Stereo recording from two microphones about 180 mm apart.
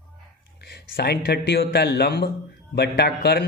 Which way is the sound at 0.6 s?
65° left (ahead or behind).